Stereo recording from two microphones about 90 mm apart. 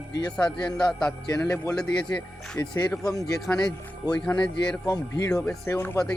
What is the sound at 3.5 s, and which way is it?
Speech, 15° left (ahead or behind).